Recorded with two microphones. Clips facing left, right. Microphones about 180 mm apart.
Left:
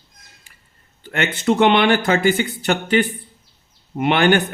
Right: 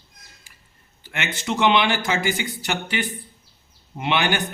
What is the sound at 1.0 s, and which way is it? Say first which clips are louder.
Speech: left 9 dB; 55° left (ahead or behind).